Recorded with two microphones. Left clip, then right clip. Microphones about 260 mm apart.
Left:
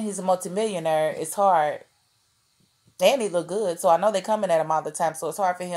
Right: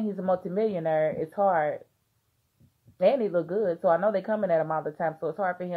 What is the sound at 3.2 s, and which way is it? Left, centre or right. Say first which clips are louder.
Speech: left 1 dB; left.